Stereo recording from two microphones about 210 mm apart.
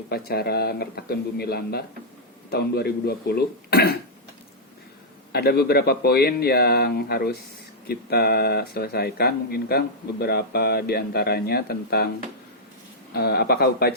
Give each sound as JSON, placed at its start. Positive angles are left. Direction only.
{"t": 0.1, "sound": "speech", "side_deg": 50}
{"t": 5.3, "sound": "speech", "side_deg": 50}
{"t": 13.1, "sound": "speech", "side_deg": 50}